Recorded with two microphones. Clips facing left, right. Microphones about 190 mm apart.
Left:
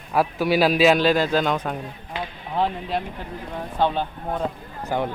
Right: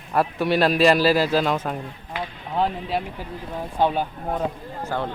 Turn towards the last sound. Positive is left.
turn(degrees=15)  # may be behind; listen again after turning